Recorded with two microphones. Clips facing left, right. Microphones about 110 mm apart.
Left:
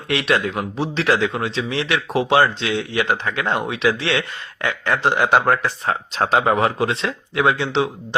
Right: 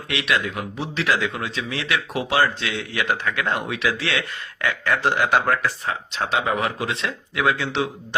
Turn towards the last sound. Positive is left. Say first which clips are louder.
# left 4 dB
turn(degrees=25)  # may be behind; listen again after turning